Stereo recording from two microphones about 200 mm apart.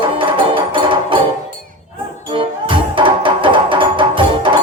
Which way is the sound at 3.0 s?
25° right (ahead or behind).